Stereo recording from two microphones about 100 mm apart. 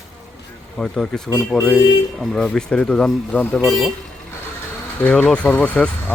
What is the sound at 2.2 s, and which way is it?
Speech, 5° left (ahead or behind).